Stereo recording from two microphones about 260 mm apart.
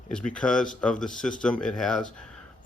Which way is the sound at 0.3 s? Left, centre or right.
Centre.